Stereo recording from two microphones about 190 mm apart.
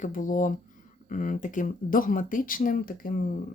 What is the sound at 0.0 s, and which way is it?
Speech, 45° left (ahead or behind).